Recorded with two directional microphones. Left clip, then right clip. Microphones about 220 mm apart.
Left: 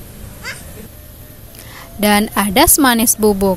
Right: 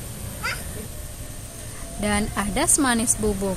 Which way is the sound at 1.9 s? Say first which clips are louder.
Left 11 dB; 45° left (ahead or behind).